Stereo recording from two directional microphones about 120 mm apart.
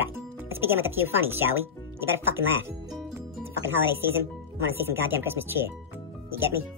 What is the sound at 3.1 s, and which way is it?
Music, 20° right (ahead or behind).